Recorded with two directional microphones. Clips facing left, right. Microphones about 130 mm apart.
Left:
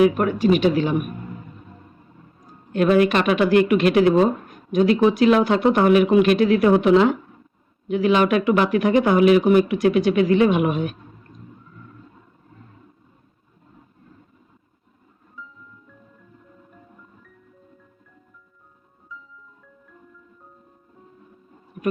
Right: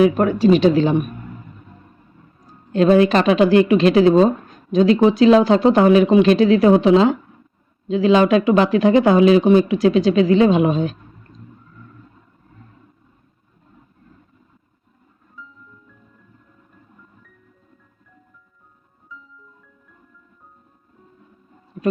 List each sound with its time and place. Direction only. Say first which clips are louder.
0.0 s speech: right 3 dB; 30° right (ahead or behind)
2.7 s speech: right 3 dB; 30° right (ahead or behind)